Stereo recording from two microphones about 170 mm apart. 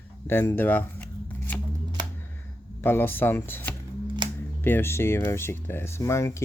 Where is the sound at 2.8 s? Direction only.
10° left (ahead or behind).